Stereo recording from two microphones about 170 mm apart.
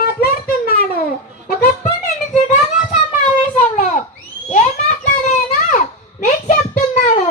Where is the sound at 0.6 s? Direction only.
60° left (ahead or behind).